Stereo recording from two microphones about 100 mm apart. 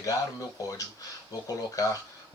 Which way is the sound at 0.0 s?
35° left (ahead or behind).